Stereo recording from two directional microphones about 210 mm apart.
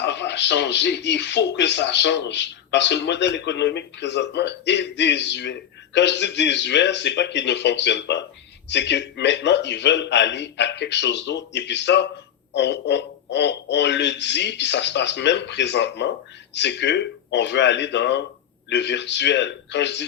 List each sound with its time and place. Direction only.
0.0 s speech: 55° left (ahead or behind)